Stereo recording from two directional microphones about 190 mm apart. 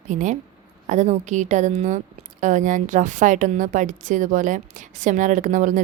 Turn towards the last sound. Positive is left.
turn(degrees=-40)  # may be behind; listen again after turning